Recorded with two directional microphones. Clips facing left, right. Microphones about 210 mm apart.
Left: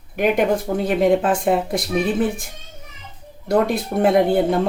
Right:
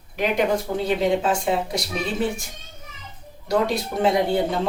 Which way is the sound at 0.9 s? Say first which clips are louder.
Left 4 dB; 55° left (ahead or behind).